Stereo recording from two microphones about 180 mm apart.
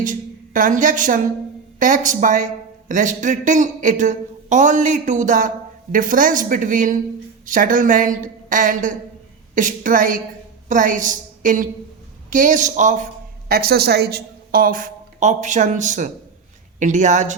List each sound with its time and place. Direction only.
0.0 s a woman's voice: 45° right (ahead or behind)
13.5 s a woman's voice: 60° right (ahead or behind); by 17.3 s 45° right (ahead or behind)